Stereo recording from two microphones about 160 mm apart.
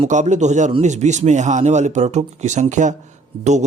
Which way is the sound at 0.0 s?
50° right (ahead or behind).